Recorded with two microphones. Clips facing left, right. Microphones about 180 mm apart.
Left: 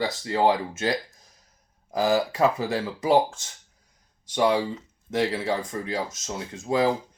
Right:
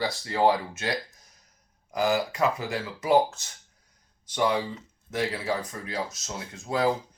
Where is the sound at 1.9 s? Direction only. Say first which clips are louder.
Left 3 dB; 30° left (ahead or behind).